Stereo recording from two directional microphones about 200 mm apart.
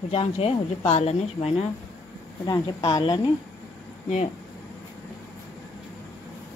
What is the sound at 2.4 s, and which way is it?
Speech, 20° left (ahead or behind).